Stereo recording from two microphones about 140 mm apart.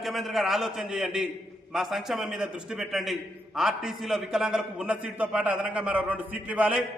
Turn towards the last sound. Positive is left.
turn(degrees=-10)  # may be behind; listen again after turning